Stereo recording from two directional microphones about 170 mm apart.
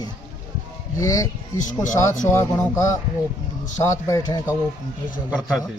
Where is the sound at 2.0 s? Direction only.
15° left (ahead or behind).